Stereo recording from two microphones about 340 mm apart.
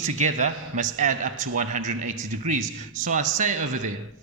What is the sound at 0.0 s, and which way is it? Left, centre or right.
A man's voice, right.